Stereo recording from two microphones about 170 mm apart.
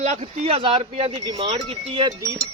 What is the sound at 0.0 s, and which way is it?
Speech, 40° right (ahead or behind).